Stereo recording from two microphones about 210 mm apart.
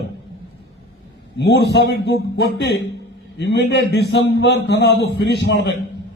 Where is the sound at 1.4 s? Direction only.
55° left (ahead or behind).